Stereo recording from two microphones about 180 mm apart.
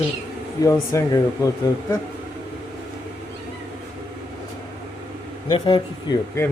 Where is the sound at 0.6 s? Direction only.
15° left (ahead or behind).